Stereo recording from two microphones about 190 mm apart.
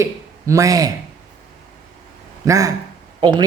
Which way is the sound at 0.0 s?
15° right (ahead or behind).